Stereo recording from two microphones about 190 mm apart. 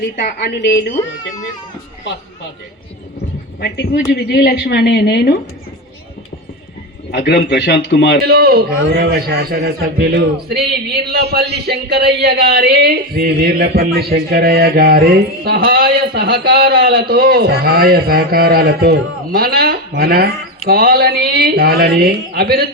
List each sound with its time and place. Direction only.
0.0 s a woman's voice: 60° left (ahead or behind)
3.6 s a woman's voice: 65° left (ahead or behind)
7.1 s a woman's voice: 60° left (ahead or behind)
8.2 s a man's voice: 55° right (ahead or behind)